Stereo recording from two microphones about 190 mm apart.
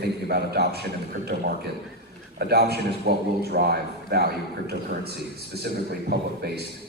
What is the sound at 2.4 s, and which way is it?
A man's voice, 55° right (ahead or behind).